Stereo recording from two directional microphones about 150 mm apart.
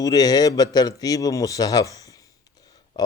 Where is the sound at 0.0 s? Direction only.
25° left (ahead or behind).